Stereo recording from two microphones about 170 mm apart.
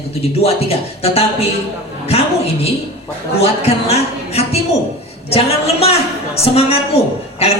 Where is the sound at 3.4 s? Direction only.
35° left (ahead or behind).